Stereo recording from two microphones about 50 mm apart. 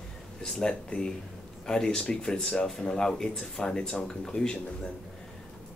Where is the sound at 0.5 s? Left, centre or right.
Centre.